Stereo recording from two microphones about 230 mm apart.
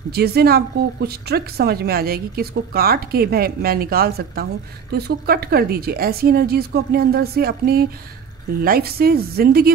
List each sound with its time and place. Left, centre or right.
0.1 s speech: right